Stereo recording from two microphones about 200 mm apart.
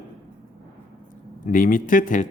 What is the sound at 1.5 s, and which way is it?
Speech, 40° left (ahead or behind).